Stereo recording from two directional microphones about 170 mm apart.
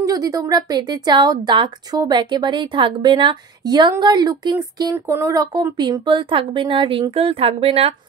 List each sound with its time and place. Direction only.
0.0 s a woman's voice: 20° right (ahead or behind); by 7.9 s 35° right (ahead or behind)